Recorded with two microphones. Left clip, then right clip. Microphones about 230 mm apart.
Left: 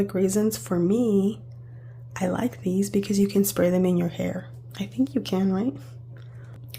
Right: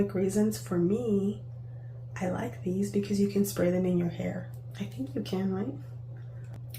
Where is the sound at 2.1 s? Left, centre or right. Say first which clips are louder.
Left 7 dB; left.